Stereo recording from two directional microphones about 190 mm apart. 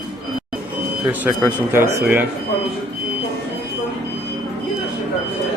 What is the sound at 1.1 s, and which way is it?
Speech, 15° right (ahead or behind).